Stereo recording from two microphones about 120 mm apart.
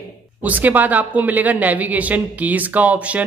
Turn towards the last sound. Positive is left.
turn(degrees=-10)  # may be behind; listen again after turning